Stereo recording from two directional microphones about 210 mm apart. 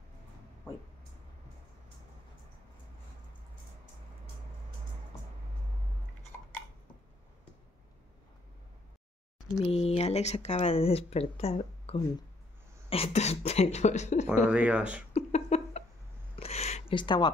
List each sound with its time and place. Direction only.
9.5 s speech: 30° left (ahead or behind)
14.5 s speech: 5° right (ahead or behind)
15.1 s a sound: 30° left (ahead or behind)
16.9 s speech: 20° left (ahead or behind)